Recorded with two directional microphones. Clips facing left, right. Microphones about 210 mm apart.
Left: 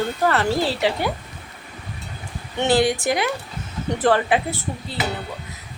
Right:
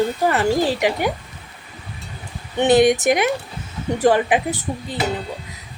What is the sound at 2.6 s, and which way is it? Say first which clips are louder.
Speech: right 5 dB; 20° right (ahead or behind).